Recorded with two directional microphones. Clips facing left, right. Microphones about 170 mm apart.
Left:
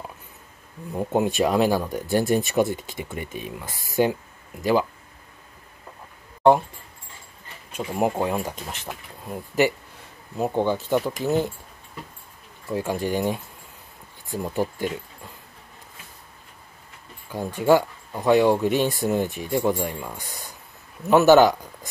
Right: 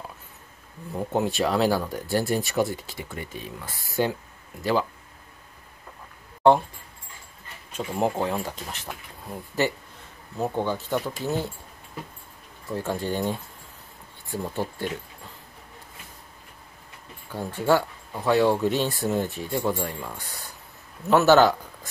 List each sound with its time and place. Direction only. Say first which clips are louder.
0.9 s speech: left 3 dB; 15° left (ahead or behind)
7.7 s speech: left 2 dB; 10° left (ahead or behind)
12.6 s speech: left 3 dB; 10° left (ahead or behind)
17.3 s speech: left 4 dB; 15° left (ahead or behind)